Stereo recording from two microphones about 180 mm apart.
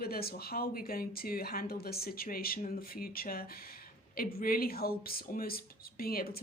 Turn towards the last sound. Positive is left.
turn(degrees=55)  # may be behind; listen again after turning